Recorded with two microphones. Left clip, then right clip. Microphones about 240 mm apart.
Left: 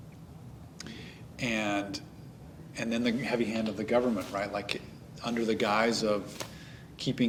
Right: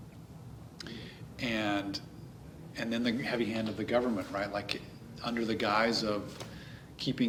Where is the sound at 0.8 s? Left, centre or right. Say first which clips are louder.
Even; left.